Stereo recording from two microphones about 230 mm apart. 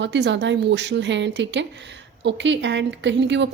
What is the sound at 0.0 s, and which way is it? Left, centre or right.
Speech, right.